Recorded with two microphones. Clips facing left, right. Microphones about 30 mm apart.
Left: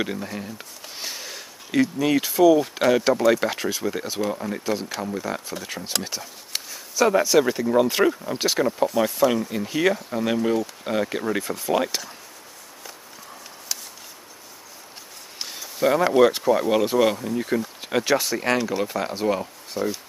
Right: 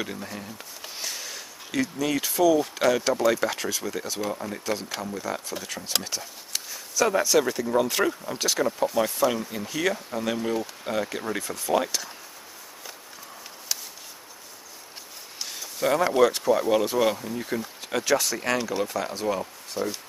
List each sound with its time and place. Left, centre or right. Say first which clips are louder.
0.0 s speech: left 5 dB; centre
0.9 s a sound: left 1 dB; centre
2.7 s speech: left 3 dB; centre
7.0 s speech: left 4 dB; centre
8.8 s speech: left 3 dB; centre
15.4 s a sound: left 4 dB; centre
16.2 s speech: left 3 dB; centre
18.6 s speech: left 3 dB; centre